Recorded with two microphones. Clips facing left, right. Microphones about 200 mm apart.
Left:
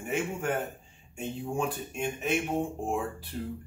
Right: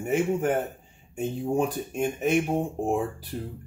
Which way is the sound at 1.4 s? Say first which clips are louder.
Right 6 dB; 40° right (ahead or behind).